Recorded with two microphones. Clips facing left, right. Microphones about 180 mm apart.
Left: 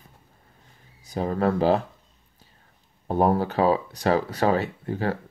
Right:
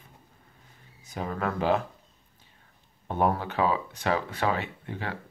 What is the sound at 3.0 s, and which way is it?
Speech, 35° left (ahead or behind).